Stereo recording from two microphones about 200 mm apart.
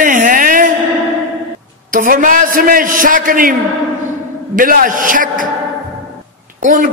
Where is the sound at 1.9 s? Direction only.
45° right (ahead or behind).